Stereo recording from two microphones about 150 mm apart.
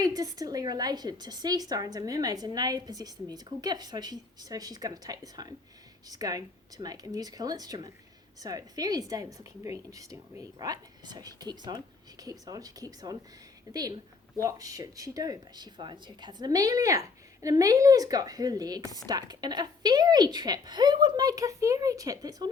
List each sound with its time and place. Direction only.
0.0 s a woman's voice: 25° right (ahead or behind)
18.8 s speech: 25° left (ahead or behind)
19.0 s a woman's voice: 25° right (ahead or behind)